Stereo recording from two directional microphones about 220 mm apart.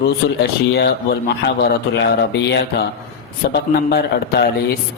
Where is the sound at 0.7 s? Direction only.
45° left (ahead or behind).